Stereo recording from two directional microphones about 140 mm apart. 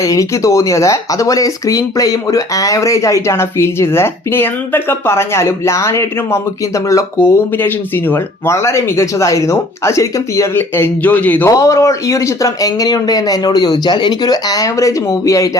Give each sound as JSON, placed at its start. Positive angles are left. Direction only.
{"t": 0.0, "sound": "speech", "side_deg": 25}